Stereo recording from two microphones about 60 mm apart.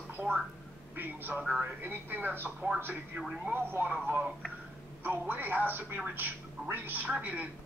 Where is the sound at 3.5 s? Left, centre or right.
Right.